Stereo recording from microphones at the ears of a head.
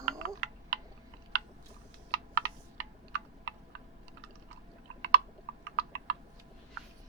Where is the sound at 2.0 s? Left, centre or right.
Right.